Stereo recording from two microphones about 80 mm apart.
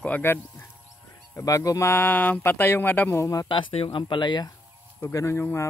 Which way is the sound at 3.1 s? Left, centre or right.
Left.